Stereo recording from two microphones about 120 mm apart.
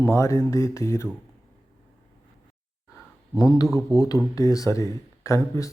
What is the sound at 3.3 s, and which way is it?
Speech, 30° left (ahead or behind).